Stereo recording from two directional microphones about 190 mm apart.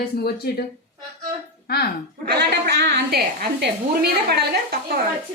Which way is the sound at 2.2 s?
60° right (ahead or behind).